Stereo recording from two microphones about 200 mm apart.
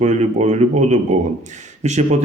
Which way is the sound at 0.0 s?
35° right (ahead or behind).